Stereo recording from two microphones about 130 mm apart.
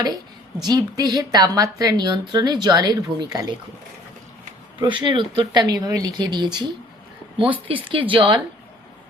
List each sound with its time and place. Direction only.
0.6 s a woman's voice: 30° right (ahead or behind)
4.8 s a woman's voice: 40° right (ahead or behind)
7.9 s a woman's voice: 40° right (ahead or behind)